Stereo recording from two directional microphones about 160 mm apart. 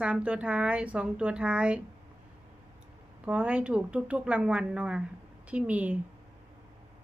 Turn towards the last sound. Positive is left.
turn(degrees=-10)  # may be behind; listen again after turning